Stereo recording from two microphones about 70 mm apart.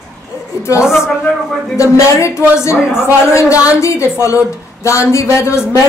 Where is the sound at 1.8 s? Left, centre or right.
Left.